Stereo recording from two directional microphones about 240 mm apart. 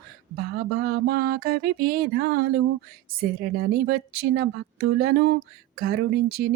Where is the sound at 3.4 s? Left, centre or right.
Right.